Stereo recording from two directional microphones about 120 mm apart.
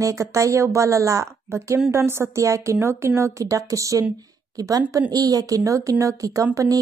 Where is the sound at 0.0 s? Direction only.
25° right (ahead or behind).